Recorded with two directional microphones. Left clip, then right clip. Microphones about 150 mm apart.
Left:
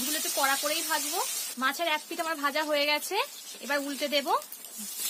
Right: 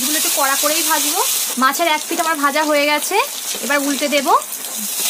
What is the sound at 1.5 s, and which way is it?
A woman's voice, 45° left (ahead or behind).